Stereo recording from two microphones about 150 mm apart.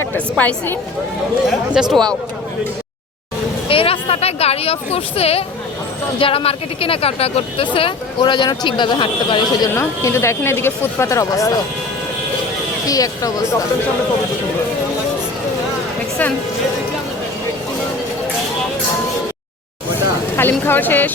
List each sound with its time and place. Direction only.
0.0 s speech: 10° left (ahead or behind)
1.5 s speech: 5° right (ahead or behind)
3.7 s speech: 40° left (ahead or behind)
9.7 s speech: 15° left (ahead or behind)
12.8 s speech: 25° left (ahead or behind)
20.3 s speech: 15° left (ahead or behind)